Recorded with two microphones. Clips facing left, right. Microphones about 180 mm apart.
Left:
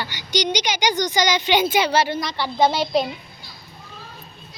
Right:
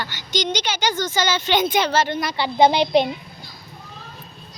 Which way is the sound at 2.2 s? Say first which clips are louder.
Right 3 dB; 10° right (ahead or behind).